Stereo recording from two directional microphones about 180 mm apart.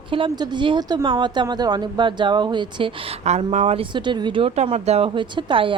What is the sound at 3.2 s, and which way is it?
Speech, 35° right (ahead or behind).